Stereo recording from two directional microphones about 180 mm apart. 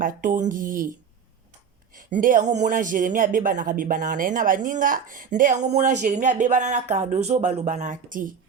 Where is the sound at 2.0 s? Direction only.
45° right (ahead or behind).